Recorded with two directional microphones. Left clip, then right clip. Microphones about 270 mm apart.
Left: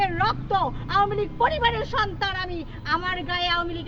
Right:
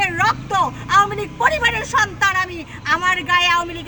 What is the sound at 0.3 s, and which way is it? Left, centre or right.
Speech, centre.